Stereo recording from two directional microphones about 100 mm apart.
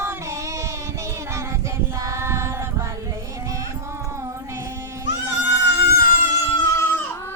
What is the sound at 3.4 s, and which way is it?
Music, 30° right (ahead or behind).